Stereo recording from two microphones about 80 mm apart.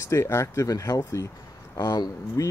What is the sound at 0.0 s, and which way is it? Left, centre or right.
Speech, left.